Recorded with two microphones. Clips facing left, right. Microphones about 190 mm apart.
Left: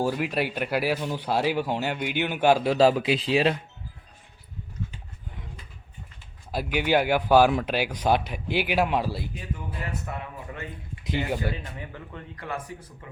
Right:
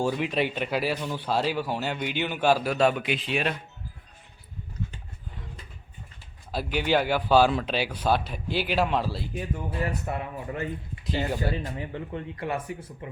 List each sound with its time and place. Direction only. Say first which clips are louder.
0.0 s speech: even; 5° left (ahead or behind)
2.6 s speech: left 4 dB; 30° left (ahead or behind)
6.5 s speech: left 1 dB; 10° left (ahead or behind)
9.6 s speech: right 4 dB; 25° right (ahead or behind)
11.0 s speech: left 1 dB; 15° left (ahead or behind)
11.5 s speech: right 5 dB; 30° right (ahead or behind)